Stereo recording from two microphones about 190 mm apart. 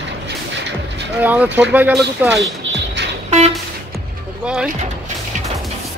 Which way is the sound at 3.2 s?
35° right (ahead or behind).